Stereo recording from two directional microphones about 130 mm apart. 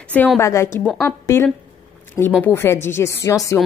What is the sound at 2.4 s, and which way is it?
A woman's voice, 20° left (ahead or behind).